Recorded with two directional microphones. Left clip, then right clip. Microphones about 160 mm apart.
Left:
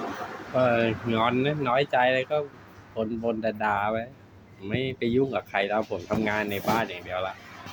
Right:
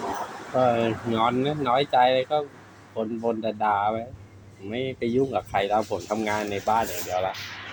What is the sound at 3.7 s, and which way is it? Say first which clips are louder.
Speech: right 4 dB; 20° left (ahead or behind).